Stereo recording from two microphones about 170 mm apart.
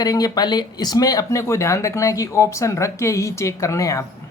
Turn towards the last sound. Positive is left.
turn(degrees=20)  # may be behind; listen again after turning